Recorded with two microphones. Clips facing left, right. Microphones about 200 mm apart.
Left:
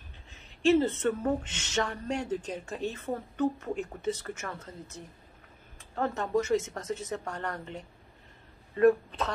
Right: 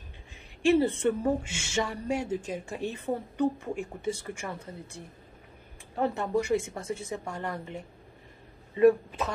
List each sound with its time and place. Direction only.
0.3 s a woman's voice: 15° right (ahead or behind)